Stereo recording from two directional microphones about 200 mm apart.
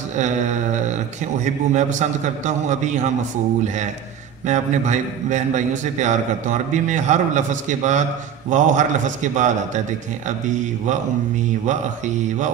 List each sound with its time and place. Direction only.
0.1 s a man's voice: 35° right (ahead or behind)